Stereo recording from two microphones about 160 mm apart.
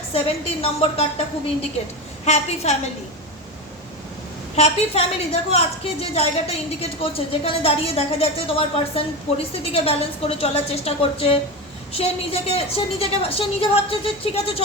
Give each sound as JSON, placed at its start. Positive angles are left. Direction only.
{"t": 0.1, "sound": "a woman's voice", "side_deg": 35}
{"t": 2.2, "sound": "a woman's voice", "side_deg": 45}
{"t": 4.5, "sound": "a woman's voice", "side_deg": 40}